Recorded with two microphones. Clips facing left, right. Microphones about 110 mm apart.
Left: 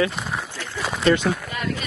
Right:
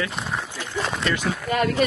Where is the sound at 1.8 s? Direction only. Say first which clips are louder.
Right 12 dB; 55° right (ahead or behind).